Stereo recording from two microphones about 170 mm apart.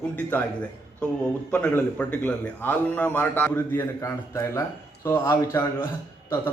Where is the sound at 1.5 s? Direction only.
10° left (ahead or behind).